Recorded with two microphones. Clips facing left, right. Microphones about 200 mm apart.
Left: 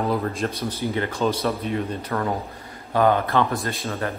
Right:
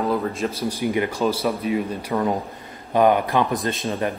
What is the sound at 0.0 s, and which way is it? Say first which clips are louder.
Speech: right 1 dB; centre (ahead or behind).